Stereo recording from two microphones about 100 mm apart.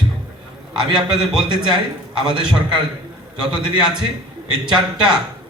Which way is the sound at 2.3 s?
50° right (ahead or behind).